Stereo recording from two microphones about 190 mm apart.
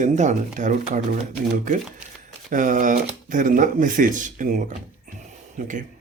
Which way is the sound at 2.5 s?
45° right (ahead or behind).